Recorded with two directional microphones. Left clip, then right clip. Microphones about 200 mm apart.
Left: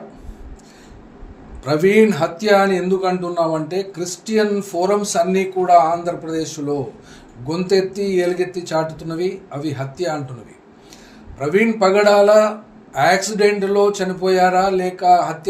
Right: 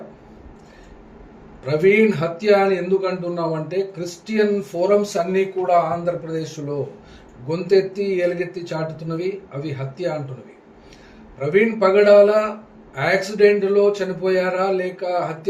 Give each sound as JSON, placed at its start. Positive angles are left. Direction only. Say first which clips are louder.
{"t": 1.6, "sound": "speech", "louder": "left 2 dB", "side_deg": 40}
{"t": 11.3, "sound": "speech", "louder": "left 1 dB", "side_deg": 40}